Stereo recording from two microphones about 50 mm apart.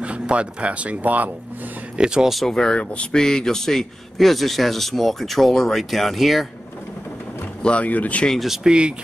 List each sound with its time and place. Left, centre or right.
0.0 s speech: right
2.0 s speech: centre
2.3 s a man's voice: centre
7.6 s speech: left
8.6 s speech: right